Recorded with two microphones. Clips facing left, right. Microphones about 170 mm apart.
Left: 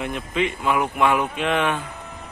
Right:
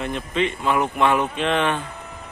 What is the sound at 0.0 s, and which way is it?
Speech, 10° left (ahead or behind).